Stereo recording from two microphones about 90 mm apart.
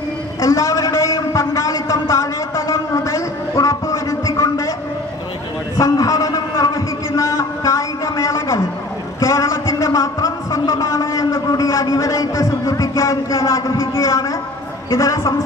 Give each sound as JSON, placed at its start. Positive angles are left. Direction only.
{"t": 0.4, "sound": "a man's voice", "side_deg": 35}
{"t": 5.8, "sound": "a sound", "side_deg": 35}
{"t": 9.2, "sound": "a man's voice", "side_deg": 35}